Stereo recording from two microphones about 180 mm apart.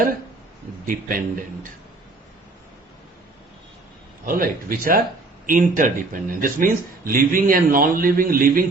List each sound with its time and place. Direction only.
0.9 s a man's voice: 50° right (ahead or behind)
4.3 s a man's voice: 50° right (ahead or behind)